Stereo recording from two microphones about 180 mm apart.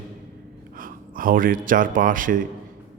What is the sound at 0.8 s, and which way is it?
Speech, 50° right (ahead or behind).